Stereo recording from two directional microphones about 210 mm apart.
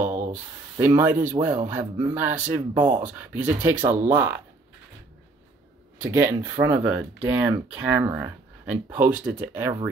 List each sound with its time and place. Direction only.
0.0 s spray: 10° right (ahead or behind)
0.7 s speech: 10° right (ahead or behind)
5.9 s speech: 10° right (ahead or behind)